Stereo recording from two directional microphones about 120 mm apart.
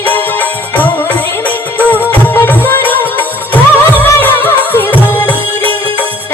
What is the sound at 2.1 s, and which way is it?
Music, 15° left (ahead or behind).